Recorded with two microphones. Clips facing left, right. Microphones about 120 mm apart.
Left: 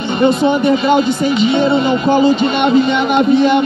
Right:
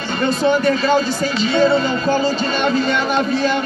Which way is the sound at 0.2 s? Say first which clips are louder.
Left 4 dB; 15° left (ahead or behind).